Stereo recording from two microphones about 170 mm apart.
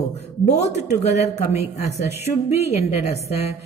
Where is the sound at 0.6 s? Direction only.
40° left (ahead or behind).